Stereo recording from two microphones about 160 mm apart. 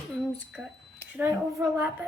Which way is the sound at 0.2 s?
Centre (ahead or behind).